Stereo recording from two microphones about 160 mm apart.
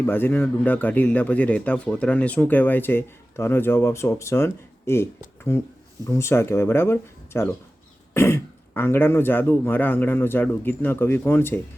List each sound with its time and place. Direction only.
0.0 s speech: 15° left (ahead or behind)